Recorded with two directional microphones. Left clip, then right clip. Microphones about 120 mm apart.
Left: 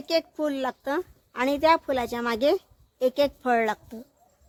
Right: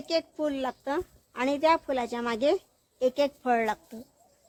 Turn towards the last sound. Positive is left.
turn(degrees=45)  # may be behind; listen again after turning